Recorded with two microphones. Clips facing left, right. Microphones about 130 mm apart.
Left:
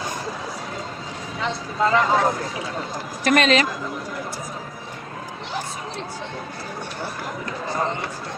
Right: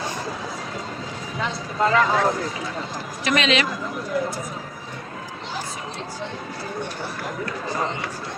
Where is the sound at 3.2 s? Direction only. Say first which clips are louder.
Left 3 dB; 45° left (ahead or behind).